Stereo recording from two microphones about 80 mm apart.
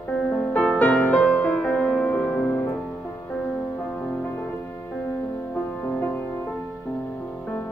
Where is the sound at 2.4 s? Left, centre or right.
Left.